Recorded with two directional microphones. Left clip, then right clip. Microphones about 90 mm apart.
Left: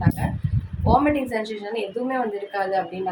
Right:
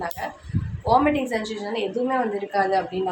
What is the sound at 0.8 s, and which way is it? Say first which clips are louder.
A woman's voice: even; 15° right (ahead or behind).